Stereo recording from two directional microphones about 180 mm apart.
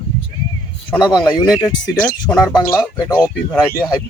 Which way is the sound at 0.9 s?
25° left (ahead or behind).